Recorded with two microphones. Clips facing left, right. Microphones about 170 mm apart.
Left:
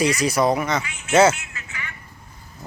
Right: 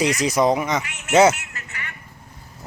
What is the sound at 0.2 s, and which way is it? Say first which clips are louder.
Speech: right 1 dB; 20° right (ahead or behind).